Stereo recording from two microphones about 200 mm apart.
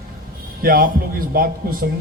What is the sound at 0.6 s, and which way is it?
A man's voice, 45° right (ahead or behind).